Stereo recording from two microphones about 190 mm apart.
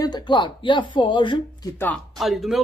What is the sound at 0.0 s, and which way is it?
Speech, 25° left (ahead or behind).